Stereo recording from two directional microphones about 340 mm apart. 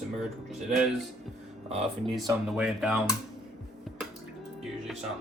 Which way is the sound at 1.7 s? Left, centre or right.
Centre.